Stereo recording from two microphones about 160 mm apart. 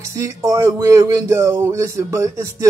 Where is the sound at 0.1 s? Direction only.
20° right (ahead or behind).